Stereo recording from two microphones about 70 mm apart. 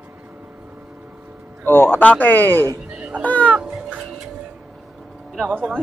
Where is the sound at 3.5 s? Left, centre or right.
Centre.